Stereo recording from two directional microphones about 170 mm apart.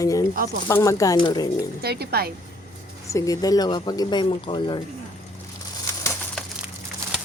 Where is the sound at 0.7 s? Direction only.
20° left (ahead or behind).